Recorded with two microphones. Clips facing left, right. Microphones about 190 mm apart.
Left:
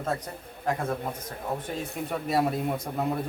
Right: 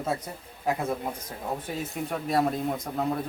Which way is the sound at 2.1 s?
5° left (ahead or behind).